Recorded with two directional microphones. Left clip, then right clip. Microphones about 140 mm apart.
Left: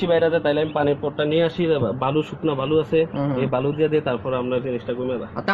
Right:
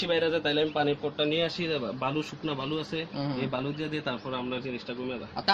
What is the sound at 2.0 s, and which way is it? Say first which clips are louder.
Speech: left 9 dB; 55° left (ahead or behind).